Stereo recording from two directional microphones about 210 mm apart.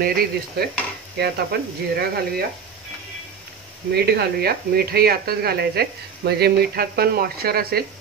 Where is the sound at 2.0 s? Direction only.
45° right (ahead or behind).